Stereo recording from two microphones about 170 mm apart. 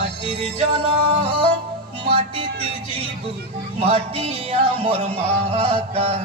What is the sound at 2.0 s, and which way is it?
Music, 30° right (ahead or behind).